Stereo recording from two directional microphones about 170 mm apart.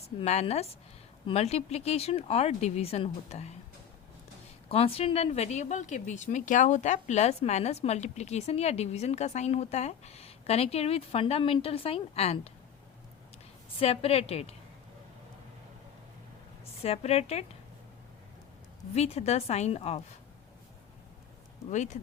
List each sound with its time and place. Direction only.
0.2 s a woman's voice: 40° left (ahead or behind)
4.7 s a woman's voice: 35° left (ahead or behind)
13.7 s a woman's voice: 35° left (ahead or behind)
16.8 s a woman's voice: 35° left (ahead or behind)
18.9 s a woman's voice: 40° left (ahead or behind)
21.7 s speech: 45° left (ahead or behind)